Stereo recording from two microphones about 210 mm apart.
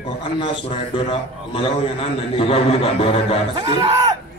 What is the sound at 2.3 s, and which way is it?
A man's voice, 25° left (ahead or behind).